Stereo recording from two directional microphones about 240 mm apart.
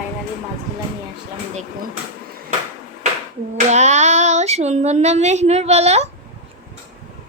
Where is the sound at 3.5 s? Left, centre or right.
Right.